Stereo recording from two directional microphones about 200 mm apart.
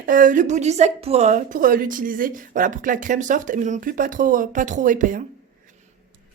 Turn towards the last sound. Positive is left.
turn(degrees=-40)  # may be behind; listen again after turning